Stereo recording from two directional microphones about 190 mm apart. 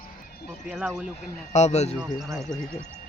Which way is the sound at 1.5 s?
35° left (ahead or behind).